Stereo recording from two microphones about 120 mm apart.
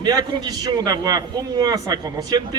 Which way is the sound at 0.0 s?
35° right (ahead or behind).